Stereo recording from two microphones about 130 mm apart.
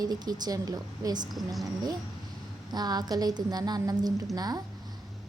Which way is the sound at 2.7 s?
30° right (ahead or behind).